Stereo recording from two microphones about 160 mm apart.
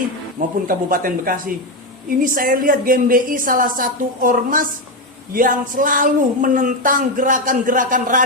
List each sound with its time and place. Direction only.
0.3 s speech: 60° right (ahead or behind)